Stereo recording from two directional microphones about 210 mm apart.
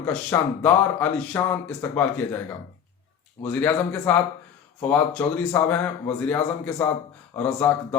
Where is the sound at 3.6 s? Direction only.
10° left (ahead or behind).